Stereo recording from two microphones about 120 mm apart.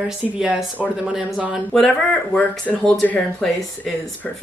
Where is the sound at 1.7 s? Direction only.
10° left (ahead or behind).